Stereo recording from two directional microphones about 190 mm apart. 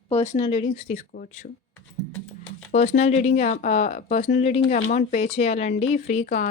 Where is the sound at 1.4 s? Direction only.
50° left (ahead or behind).